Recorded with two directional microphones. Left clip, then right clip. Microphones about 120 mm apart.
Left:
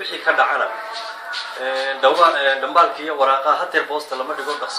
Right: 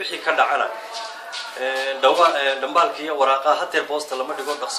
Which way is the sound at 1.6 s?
35° right (ahead or behind).